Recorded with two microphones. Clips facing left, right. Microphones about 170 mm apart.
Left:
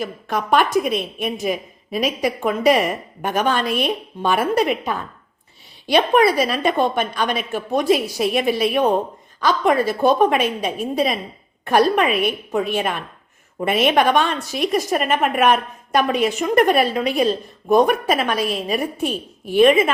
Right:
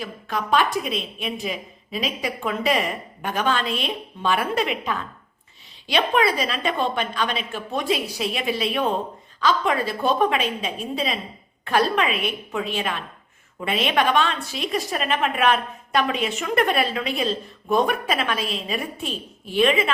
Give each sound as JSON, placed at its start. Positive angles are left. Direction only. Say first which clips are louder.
{"t": 0.0, "sound": "a woman's voice", "louder": "left 4 dB", "side_deg": 45}